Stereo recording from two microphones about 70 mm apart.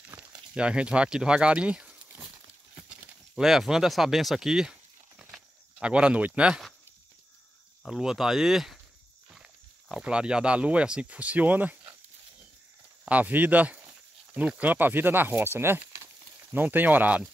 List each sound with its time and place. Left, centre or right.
0.0 s speech: centre
2.1 s a sound: right
3.4 s speech: centre
5.2 s a sound: centre
7.8 s speech: centre; by 11.9 s right
13.1 s speech: right
16.5 s speech: right